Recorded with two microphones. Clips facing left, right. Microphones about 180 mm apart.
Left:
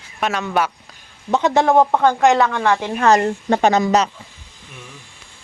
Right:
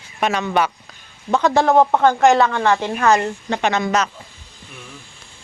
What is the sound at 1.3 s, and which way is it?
Speech, 20° left (ahead or behind).